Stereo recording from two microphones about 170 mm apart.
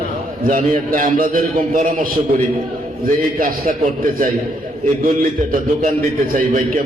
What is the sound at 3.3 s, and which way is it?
Speech, 55° right (ahead or behind).